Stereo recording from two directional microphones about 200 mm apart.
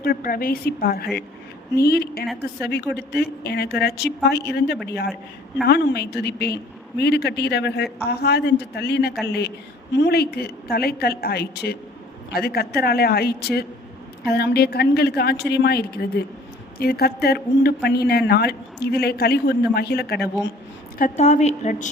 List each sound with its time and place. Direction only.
0.0 s a woman's voice: 45° left (ahead or behind)
21.0 s a woman's voice: 35° left (ahead or behind)